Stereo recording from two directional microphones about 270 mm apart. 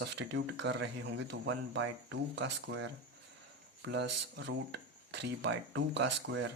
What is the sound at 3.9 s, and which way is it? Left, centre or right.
Speech, right.